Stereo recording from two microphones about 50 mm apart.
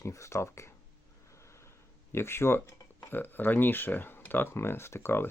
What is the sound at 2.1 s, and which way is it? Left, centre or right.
Speech, left.